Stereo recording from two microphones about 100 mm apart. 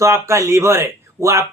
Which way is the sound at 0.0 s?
30° right (ahead or behind).